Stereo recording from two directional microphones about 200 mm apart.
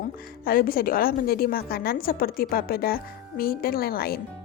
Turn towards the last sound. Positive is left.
turn(degrees=50)  # may be behind; listen again after turning